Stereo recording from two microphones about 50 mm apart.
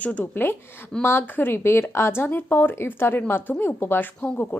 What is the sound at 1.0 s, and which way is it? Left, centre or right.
A woman's voice, left.